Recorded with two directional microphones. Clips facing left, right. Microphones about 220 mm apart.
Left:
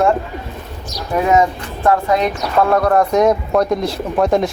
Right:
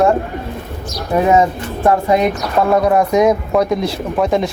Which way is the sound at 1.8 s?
20° right (ahead or behind).